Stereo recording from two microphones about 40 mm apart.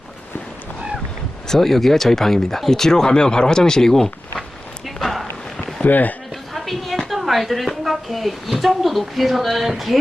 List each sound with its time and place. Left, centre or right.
1.5 s speech: centre
4.9 s a sound: centre
5.8 s speech: left
6.3 s a woman's voice: centre